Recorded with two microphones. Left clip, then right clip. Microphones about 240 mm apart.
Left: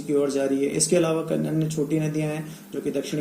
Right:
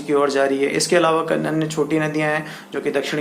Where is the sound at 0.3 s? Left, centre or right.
Right.